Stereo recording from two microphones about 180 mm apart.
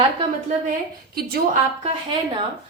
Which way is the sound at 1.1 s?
55° right (ahead or behind).